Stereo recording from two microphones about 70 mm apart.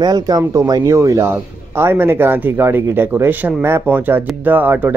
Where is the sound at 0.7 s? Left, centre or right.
Right.